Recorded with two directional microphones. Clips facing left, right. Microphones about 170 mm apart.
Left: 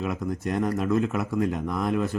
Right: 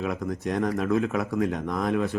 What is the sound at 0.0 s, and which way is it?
Speech, centre (ahead or behind).